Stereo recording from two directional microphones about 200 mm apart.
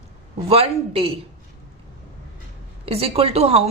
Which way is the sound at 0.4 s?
30° right (ahead or behind).